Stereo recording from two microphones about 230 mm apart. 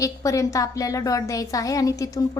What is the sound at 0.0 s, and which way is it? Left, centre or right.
A woman's voice, centre.